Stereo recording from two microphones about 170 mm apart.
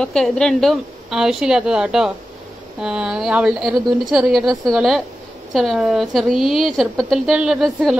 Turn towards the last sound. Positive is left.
turn(degrees=-5)  # may be behind; listen again after turning